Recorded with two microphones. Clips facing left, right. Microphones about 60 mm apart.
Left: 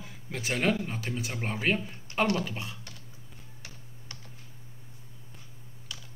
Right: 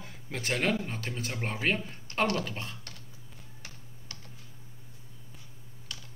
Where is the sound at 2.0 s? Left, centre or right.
Centre.